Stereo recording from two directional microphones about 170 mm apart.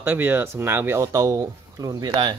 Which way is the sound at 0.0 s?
10° right (ahead or behind).